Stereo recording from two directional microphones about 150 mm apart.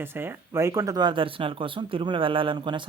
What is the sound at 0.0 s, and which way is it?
Speech, 15° right (ahead or behind).